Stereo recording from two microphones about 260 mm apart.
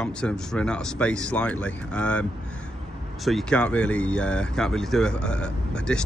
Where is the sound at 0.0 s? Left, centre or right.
Centre.